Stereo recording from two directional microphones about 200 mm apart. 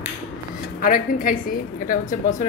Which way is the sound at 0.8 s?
45° left (ahead or behind).